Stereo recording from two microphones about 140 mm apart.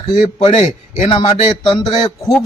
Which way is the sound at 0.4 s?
50° left (ahead or behind).